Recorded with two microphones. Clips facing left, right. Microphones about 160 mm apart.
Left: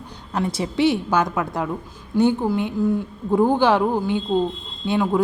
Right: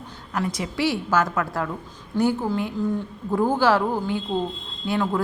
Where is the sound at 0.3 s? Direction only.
30° left (ahead or behind).